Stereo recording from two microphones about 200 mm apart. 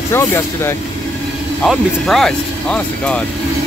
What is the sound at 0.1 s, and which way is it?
Speech, 15° left (ahead or behind).